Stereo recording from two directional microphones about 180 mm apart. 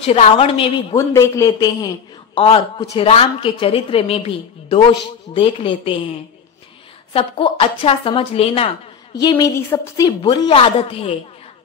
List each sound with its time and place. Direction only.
0.0 s a woman's voice: 35° left (ahead or behind)
0.9 s a man's voice: 15° left (ahead or behind)
7.2 s a woman's voice: 30° left (ahead or behind)